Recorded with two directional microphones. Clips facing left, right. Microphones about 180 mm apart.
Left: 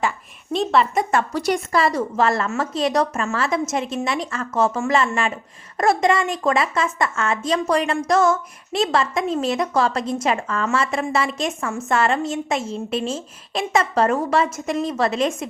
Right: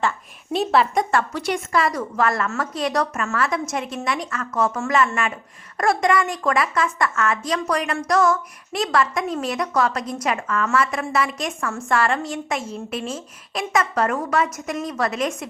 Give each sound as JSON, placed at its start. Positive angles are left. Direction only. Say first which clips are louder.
{"t": 0.5, "sound": "a woman's voice", "louder": "even", "side_deg": -5}
{"t": 1.3, "sound": "a woman's voice", "louder": "left 2 dB", "side_deg": 35}